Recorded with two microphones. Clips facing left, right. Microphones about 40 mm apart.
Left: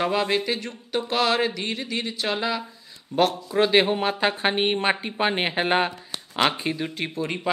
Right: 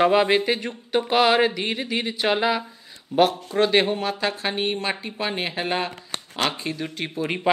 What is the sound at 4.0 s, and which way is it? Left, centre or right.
A woman's voice, left.